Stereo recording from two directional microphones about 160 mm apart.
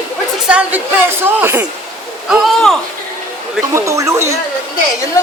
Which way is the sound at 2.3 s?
Centre (ahead or behind).